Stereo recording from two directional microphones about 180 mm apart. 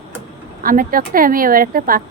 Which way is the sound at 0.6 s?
50° right (ahead or behind).